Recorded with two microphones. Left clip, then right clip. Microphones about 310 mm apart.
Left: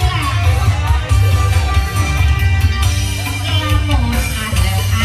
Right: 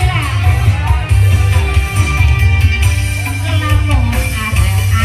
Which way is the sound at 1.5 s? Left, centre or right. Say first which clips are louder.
Right 1 dB; centre.